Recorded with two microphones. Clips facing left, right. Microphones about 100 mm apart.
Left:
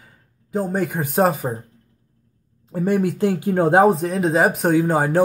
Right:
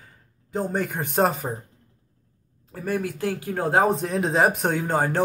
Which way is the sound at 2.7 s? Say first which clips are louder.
Left 7 dB; 25° left (ahead or behind).